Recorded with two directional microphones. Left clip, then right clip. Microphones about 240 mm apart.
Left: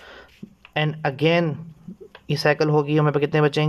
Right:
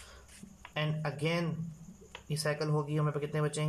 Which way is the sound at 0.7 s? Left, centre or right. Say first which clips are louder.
Left 13 dB; left.